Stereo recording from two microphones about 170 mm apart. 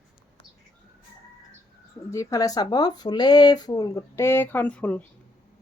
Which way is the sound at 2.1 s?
20° left (ahead or behind).